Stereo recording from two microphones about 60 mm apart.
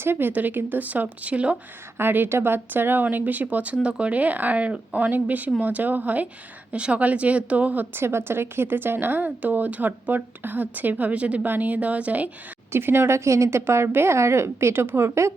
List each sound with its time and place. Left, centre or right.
0.0 s speech: right
2.0 s a woman's voice: right
8.0 s a woman's voice: right
12.7 s a woman's voice: right